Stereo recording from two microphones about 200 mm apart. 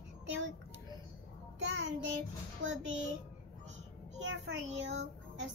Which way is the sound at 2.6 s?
70° right (ahead or behind).